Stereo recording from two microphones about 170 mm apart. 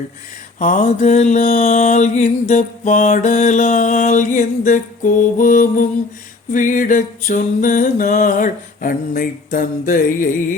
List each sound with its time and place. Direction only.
0.6 s mantra: 50° left (ahead or behind)